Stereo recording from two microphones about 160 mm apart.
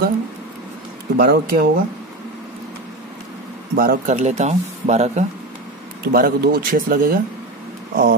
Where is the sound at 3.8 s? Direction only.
65° right (ahead or behind).